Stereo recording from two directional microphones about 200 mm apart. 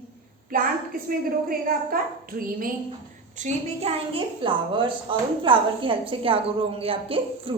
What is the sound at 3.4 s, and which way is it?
A woman's voice, 35° right (ahead or behind).